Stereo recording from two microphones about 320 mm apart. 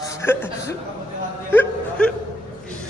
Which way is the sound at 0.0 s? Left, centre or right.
Centre.